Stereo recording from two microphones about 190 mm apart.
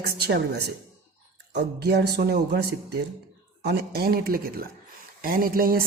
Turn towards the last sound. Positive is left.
turn(degrees=-50)  # may be behind; listen again after turning